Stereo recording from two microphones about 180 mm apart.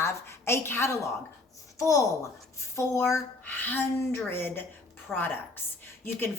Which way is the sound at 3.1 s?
10° left (ahead or behind).